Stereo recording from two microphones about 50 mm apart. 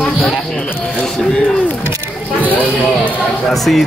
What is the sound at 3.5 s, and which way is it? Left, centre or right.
Speech, centre.